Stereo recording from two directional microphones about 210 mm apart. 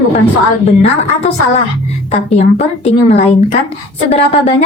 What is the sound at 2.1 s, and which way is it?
A woman's voice, 30° left (ahead or behind).